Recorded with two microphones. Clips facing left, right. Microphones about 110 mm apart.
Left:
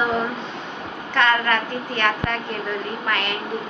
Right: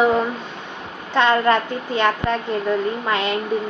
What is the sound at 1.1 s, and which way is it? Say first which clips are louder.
A woman's voice: right 4 dB; 25° right (ahead or behind).